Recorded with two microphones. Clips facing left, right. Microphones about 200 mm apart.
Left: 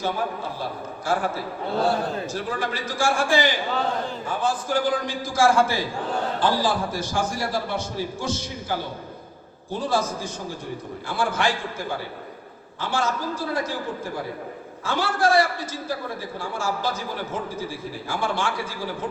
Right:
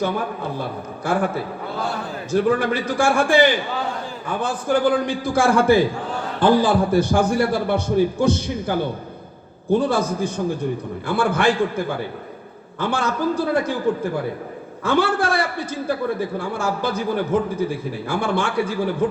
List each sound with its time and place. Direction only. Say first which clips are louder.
1.0 s a man's voice: right 4 dB; 60° right (ahead or behind)
14.8 s a man's voice: right 3 dB; 60° right (ahead or behind)